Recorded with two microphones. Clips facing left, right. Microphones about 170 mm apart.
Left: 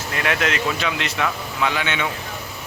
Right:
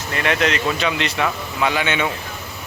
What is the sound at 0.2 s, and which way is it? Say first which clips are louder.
Speech: right 3 dB; 5° left (ahead or behind).